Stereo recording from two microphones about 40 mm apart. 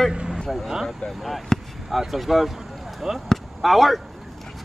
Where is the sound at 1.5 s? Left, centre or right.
Centre.